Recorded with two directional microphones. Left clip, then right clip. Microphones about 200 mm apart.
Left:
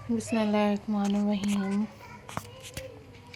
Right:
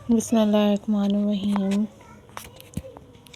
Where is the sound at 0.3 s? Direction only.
40° right (ahead or behind).